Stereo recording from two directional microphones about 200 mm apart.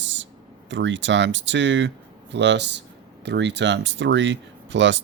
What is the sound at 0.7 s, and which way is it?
Speech, 65° right (ahead or behind).